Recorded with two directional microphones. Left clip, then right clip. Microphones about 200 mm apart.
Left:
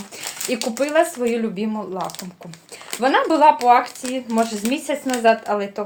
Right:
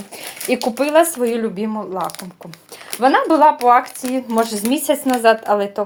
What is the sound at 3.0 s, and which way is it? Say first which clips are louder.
Speech: right 2 dB; 30° right (ahead or behind).